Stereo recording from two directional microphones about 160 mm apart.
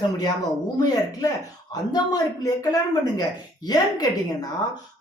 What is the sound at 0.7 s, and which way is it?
A man's voice, 25° left (ahead or behind).